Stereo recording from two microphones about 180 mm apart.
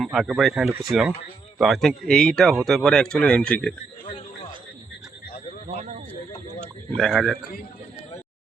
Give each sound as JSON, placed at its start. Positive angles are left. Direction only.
{"t": 0.0, "sound": "speech", "side_deg": 0}
{"t": 5.6, "sound": "speech", "side_deg": -40}
{"t": 6.6, "sound": "a man's voice", "side_deg": 0}